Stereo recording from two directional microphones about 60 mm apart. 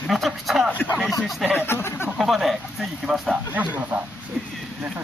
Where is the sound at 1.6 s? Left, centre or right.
Left.